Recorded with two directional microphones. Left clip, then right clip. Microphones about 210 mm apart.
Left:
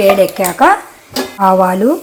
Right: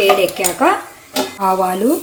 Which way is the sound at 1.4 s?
20° left (ahead or behind).